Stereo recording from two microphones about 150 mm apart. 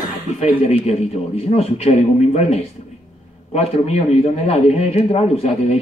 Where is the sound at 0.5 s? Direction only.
45° left (ahead or behind).